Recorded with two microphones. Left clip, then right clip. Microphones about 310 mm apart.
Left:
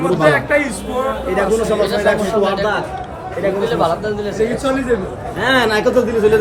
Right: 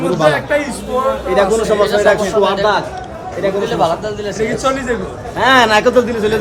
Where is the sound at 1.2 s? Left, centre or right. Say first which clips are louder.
Right 3 dB; right; by 6.3 s centre.